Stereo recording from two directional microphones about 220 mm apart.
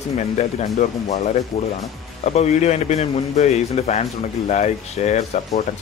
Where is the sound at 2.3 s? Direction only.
30° left (ahead or behind).